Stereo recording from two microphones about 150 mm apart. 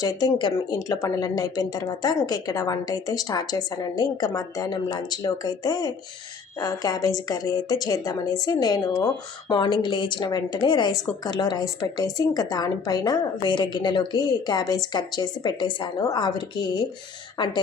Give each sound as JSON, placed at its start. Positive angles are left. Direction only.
{"t": 0.0, "sound": "a woman's voice", "side_deg": 25}